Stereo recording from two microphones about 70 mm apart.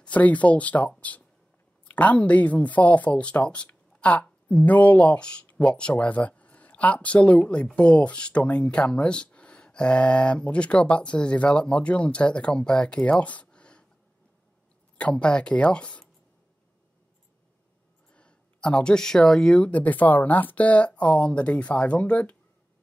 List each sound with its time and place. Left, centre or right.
0.0 s speech: centre
15.0 s speech: centre
18.1 s speech: centre
19.6 s speech: left